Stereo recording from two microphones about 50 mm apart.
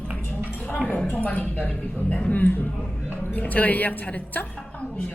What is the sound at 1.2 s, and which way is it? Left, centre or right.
A woman's voice, left.